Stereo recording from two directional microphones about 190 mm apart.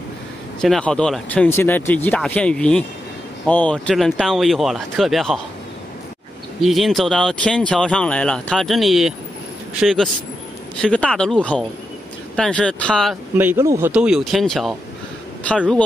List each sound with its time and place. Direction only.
0.6 s speech: 5° left (ahead or behind)
6.6 s speech: centre (ahead or behind)
12.4 s speech: 5° left (ahead or behind)